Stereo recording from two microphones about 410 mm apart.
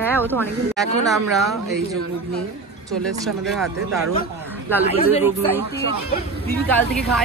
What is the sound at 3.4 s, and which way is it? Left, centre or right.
Speech, centre.